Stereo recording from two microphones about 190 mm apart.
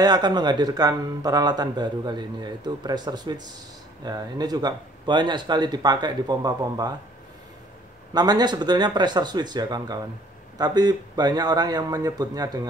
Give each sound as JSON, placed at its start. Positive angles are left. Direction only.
{"t": 0.0, "sound": "speech", "side_deg": -20}
{"t": 8.1, "sound": "speech", "side_deg": -20}